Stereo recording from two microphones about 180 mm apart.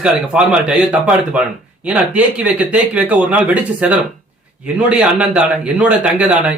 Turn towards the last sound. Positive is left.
turn(degrees=-5)  # may be behind; listen again after turning